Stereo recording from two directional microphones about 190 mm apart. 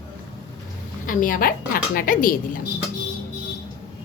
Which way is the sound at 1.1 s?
45° left (ahead or behind).